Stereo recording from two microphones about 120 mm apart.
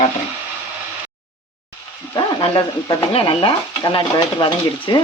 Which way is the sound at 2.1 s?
40° left (ahead or behind).